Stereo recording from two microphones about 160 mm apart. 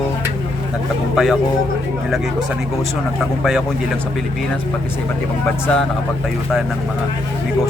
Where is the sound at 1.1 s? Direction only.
Centre (ahead or behind).